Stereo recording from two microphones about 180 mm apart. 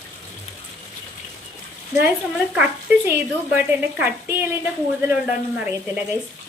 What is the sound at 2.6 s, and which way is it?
Speech, 5° right (ahead or behind).